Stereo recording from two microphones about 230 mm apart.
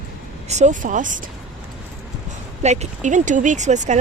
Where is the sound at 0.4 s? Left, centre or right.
Right.